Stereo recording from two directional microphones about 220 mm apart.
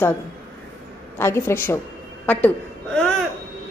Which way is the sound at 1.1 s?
10° left (ahead or behind).